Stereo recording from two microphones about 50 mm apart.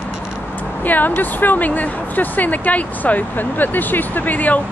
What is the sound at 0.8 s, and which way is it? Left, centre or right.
Speech, left.